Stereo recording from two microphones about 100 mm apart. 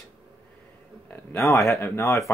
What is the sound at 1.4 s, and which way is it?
Speech, 30° left (ahead or behind).